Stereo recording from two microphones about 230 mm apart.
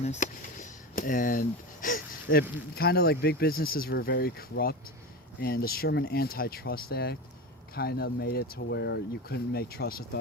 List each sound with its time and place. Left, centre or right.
0.0 s speech: left